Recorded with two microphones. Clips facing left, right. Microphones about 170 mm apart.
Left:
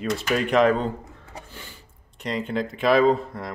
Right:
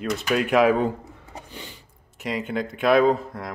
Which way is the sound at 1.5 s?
20° right (ahead or behind).